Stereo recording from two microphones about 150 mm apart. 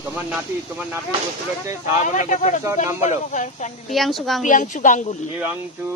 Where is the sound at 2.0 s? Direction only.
55° left (ahead or behind).